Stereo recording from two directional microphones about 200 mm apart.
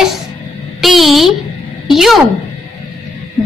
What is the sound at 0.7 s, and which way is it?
A woman's voice, centre (ahead or behind).